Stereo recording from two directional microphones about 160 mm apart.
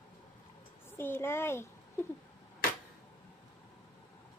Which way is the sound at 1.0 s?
15° left (ahead or behind).